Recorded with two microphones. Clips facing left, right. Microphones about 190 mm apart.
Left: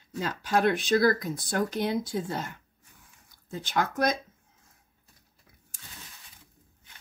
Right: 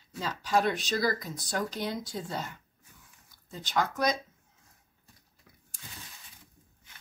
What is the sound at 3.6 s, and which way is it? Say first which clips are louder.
Speech: left 2 dB; 50° left (ahead or behind).